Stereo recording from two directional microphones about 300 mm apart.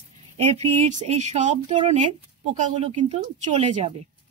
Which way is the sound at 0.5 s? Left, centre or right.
Right.